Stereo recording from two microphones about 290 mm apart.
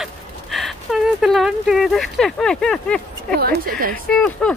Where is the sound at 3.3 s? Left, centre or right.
Right.